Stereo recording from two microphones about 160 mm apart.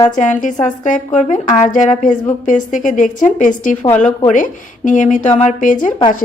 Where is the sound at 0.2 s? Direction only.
55° left (ahead or behind).